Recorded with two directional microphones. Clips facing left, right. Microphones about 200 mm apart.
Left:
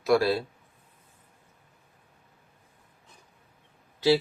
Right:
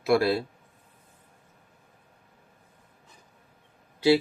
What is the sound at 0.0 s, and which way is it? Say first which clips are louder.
Speech: even; 15° right (ahead or behind).